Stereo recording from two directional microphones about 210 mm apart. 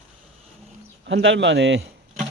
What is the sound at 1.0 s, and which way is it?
Speech, 55° right (ahead or behind).